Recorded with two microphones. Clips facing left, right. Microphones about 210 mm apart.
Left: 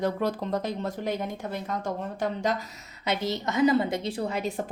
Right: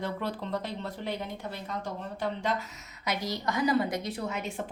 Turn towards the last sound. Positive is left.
turn(degrees=35)  # may be behind; listen again after turning